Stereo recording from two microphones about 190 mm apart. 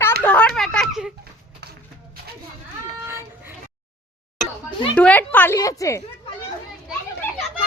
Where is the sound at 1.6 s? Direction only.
60° right (ahead or behind).